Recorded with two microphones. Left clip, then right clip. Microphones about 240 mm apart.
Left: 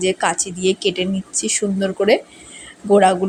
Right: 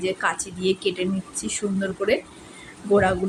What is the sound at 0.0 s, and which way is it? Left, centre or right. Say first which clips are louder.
A woman's voice: left 6 dB; left.